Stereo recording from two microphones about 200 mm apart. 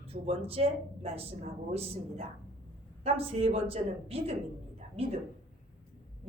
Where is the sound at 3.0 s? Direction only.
30° right (ahead or behind).